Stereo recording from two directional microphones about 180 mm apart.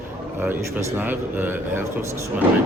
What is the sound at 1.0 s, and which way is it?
Speech, 10° right (ahead or behind).